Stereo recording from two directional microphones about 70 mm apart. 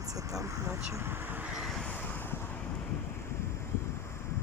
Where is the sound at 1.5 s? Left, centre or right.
Centre.